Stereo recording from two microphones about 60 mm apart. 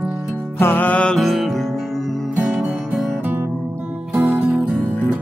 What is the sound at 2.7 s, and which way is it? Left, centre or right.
Music, centre.